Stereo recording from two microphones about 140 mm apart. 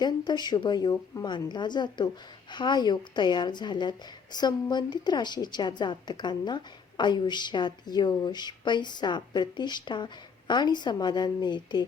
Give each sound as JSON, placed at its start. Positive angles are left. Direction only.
{"t": 0.0, "sound": "a woman's voice", "side_deg": 30}